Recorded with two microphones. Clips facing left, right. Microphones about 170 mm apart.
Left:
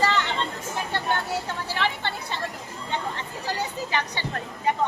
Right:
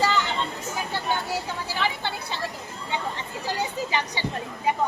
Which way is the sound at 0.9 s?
Centre (ahead or behind).